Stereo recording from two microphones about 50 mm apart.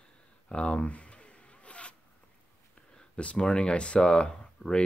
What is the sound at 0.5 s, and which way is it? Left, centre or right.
Zipper, left.